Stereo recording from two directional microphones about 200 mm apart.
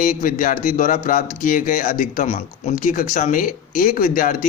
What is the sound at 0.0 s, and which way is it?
A man's voice, 45° left (ahead or behind).